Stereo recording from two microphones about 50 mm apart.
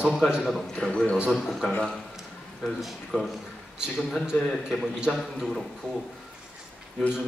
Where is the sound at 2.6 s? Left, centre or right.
Centre.